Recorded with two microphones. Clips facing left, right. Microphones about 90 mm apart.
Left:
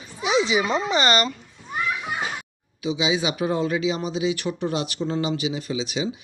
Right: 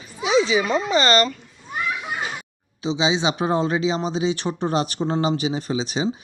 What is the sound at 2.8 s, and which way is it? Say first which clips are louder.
Speech: right 2 dB; 30° right (ahead or behind).